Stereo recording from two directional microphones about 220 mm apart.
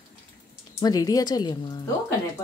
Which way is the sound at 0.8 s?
15° left (ahead or behind).